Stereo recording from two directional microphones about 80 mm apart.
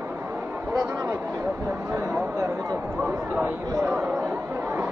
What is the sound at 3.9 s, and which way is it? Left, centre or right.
Chatter, right.